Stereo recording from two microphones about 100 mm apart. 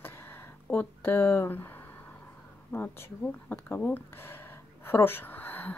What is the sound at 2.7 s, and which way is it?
Speech, 20° left (ahead or behind).